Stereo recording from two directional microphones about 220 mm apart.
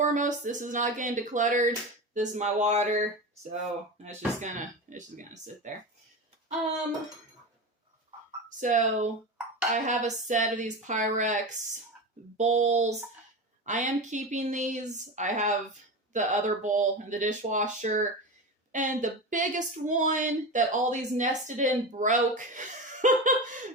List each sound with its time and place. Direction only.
0.0 s speech: 35° right (ahead or behind)
4.4 s speech: 35° right (ahead or behind)
8.4 s speech: 35° right (ahead or behind)